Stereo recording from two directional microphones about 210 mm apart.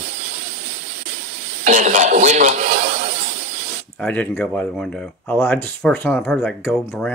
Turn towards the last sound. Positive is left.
turn(degrees=0)  # may be behind; listen again after turning